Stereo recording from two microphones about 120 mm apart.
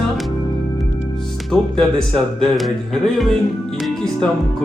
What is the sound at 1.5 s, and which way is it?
Speech, 5° left (ahead or behind).